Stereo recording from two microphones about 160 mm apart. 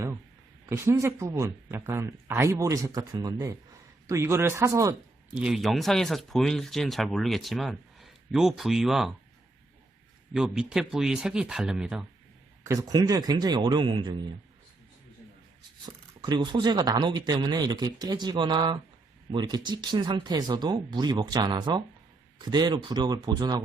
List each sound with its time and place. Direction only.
0.7 s a man's voice: 20° right (ahead or behind)
5.3 s speech: 5° right (ahead or behind)
10.3 s speech: 5° right (ahead or behind)
12.6 s speech: 20° right (ahead or behind)
15.9 s speech: 25° right (ahead or behind)